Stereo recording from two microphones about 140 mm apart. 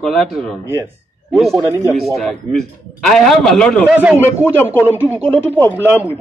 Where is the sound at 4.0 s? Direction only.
10° right (ahead or behind).